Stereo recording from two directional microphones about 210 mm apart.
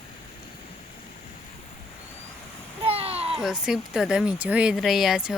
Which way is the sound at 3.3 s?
Centre (ahead or behind).